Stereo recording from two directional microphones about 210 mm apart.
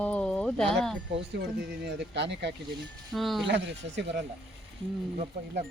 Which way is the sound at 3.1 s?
Centre (ahead or behind).